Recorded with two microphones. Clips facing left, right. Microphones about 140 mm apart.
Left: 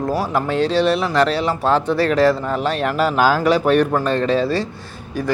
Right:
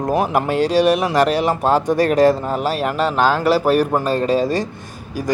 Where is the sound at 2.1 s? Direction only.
45° right (ahead or behind).